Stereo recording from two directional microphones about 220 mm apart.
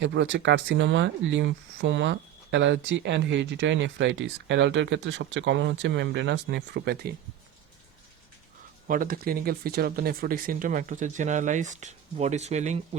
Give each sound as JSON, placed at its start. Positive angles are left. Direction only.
{"t": 0.0, "sound": "speech", "side_deg": -55}
{"t": 8.9, "sound": "speech", "side_deg": -40}